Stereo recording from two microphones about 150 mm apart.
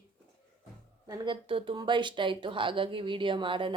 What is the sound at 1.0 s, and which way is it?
A woman's voice, 25° right (ahead or behind).